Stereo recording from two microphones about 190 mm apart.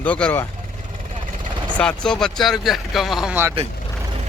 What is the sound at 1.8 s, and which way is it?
Speech, 5° left (ahead or behind).